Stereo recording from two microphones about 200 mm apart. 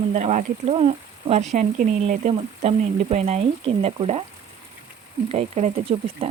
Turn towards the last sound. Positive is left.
turn(degrees=-30)  # may be behind; listen again after turning